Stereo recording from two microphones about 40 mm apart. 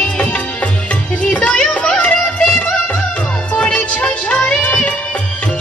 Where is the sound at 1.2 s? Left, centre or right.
Left.